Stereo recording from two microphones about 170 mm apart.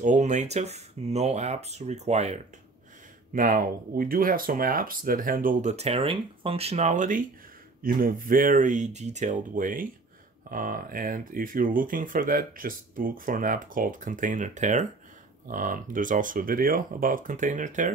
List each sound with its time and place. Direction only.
0.0 s speech: 45° right (ahead or behind)
3.3 s speech: 55° right (ahead or behind)